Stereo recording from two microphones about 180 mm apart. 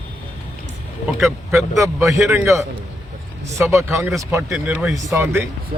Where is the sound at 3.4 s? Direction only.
15° right (ahead or behind).